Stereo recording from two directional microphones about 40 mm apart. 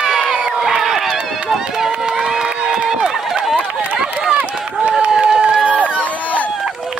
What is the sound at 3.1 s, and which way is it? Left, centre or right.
Run, centre.